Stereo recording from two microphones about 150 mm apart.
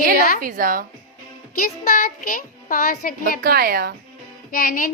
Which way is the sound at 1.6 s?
75° left (ahead or behind).